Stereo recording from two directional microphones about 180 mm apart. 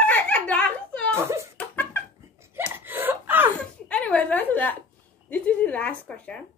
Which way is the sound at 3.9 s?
5° left (ahead or behind).